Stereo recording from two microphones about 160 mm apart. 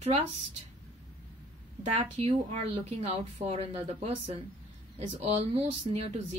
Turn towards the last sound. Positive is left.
turn(degrees=-40)  # may be behind; listen again after turning